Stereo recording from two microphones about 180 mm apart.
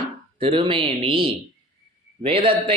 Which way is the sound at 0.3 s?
30° right (ahead or behind).